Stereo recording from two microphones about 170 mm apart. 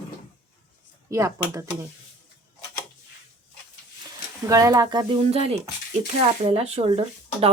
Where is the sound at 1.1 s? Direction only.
15° right (ahead or behind).